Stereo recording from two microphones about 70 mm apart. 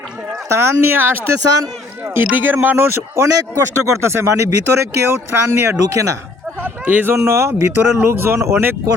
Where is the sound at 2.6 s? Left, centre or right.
Right.